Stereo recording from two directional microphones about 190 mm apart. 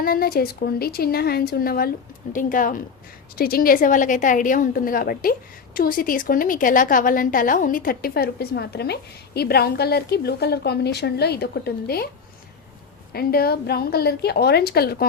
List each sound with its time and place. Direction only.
0.0 s a woman's voice: 50° left (ahead or behind)
13.1 s a woman's voice: 55° left (ahead or behind)